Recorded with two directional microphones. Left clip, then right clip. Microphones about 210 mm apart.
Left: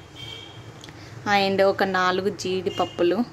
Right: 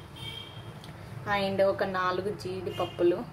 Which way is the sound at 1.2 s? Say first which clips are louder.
Left 7 dB; 45° left (ahead or behind).